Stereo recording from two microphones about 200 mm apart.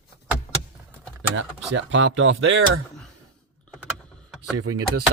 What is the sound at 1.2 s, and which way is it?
Speech, 65° right (ahead or behind).